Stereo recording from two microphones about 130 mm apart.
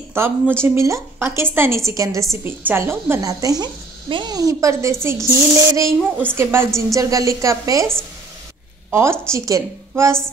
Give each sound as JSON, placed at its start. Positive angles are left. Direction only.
{"t": 0.1, "sound": "speech", "side_deg": -20}